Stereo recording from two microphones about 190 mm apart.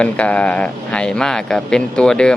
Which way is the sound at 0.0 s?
5° left (ahead or behind).